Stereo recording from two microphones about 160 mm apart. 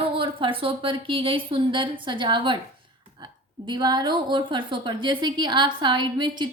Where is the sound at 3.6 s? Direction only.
30° right (ahead or behind).